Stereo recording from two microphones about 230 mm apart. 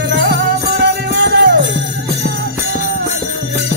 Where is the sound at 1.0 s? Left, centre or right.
Right.